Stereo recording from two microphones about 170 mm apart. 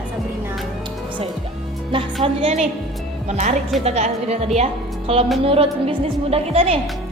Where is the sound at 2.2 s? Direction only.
40° right (ahead or behind).